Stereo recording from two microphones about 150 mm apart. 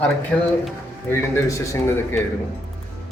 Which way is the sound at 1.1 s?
20° left (ahead or behind).